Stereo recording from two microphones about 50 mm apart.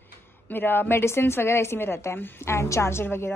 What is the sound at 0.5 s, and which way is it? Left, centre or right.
A woman's voice, left.